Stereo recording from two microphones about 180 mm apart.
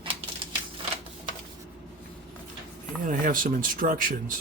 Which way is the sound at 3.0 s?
50° right (ahead or behind).